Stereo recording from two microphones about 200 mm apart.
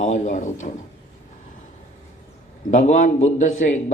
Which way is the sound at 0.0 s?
35° left (ahead or behind).